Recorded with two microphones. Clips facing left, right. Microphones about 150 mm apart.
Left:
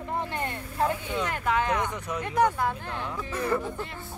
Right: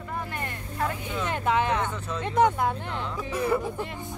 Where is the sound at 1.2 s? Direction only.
25° right (ahead or behind).